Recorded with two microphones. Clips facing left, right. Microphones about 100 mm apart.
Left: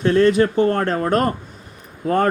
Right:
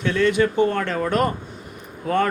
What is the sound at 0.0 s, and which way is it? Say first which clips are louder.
Speech: left 4 dB; 40° left (ahead or behind).